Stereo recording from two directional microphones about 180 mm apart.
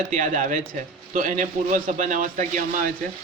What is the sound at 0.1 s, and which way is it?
A man's voice, 45° right (ahead or behind).